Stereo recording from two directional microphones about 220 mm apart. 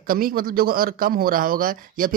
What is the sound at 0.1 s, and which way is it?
A man's voice, 40° right (ahead or behind).